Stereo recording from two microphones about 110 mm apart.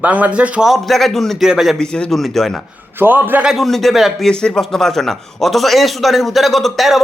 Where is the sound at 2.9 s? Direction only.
20° right (ahead or behind).